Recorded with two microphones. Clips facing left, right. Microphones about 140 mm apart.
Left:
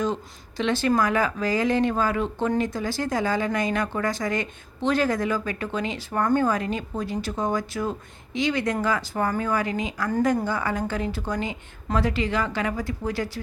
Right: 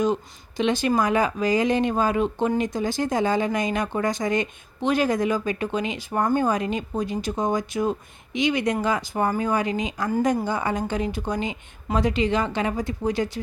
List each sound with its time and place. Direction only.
0.0 s speech: 15° right (ahead or behind)